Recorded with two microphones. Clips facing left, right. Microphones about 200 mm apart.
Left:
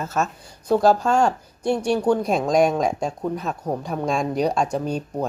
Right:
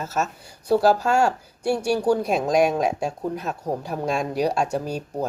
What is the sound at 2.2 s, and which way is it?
Speech, 5° right (ahead or behind).